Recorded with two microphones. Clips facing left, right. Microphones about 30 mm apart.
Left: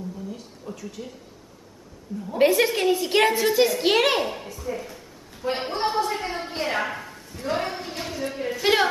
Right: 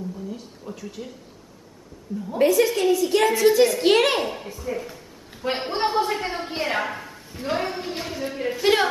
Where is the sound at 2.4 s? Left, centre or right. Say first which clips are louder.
Right 1 dB; left.